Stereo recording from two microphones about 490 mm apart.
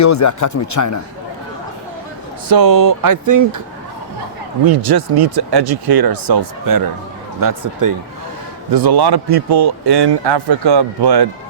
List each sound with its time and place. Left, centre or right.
0.0 s speech: left
2.5 s speech: right
4.6 s speech: right